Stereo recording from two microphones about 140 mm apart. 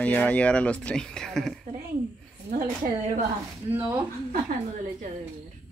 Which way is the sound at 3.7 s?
15° right (ahead or behind).